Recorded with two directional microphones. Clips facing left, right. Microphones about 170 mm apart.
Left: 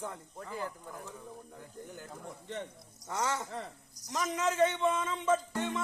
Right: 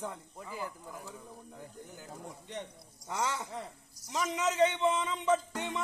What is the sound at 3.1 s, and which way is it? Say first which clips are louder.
Speech: left 1 dB; 20° right (ahead or behind).